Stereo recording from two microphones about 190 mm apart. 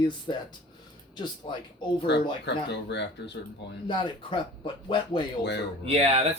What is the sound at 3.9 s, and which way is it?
Speech, 25° left (ahead or behind).